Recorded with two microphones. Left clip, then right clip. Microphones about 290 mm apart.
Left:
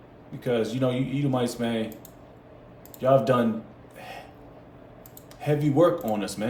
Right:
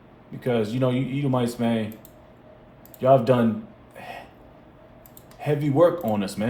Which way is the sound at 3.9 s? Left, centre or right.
Right.